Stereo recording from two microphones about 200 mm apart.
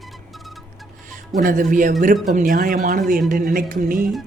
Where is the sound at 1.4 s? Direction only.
40° right (ahead or behind).